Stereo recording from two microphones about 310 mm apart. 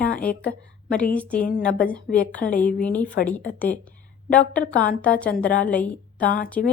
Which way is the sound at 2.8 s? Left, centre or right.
Centre.